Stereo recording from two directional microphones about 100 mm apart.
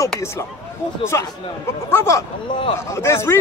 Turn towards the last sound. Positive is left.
turn(degrees=25)  # may be behind; listen again after turning